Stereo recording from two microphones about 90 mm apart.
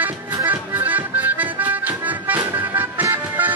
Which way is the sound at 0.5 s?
20° right (ahead or behind).